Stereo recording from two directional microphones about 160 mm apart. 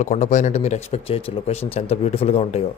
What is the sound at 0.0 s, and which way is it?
Speech, 50° left (ahead or behind).